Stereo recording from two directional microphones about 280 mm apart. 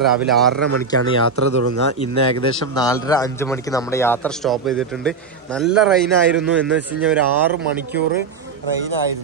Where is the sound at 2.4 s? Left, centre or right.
Centre.